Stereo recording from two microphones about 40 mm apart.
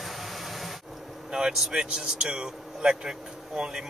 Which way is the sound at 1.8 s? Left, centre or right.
Right.